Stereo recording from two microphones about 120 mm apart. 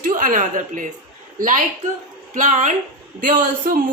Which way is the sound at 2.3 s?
85° right.